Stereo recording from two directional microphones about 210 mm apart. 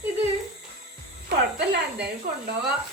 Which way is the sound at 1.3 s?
50° right (ahead or behind).